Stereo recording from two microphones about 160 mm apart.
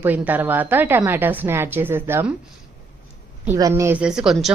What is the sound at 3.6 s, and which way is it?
Speech, 20° right (ahead or behind).